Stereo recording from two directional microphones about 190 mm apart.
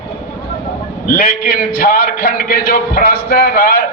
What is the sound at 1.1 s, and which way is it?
A man's voice, 50° left (ahead or behind).